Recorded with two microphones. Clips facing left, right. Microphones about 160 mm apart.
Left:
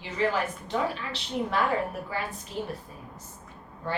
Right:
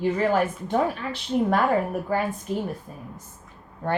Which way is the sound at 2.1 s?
45° right (ahead or behind).